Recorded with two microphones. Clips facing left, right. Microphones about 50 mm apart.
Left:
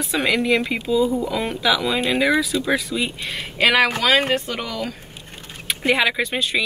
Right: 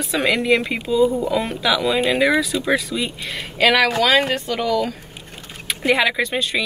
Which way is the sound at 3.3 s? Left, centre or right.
Left.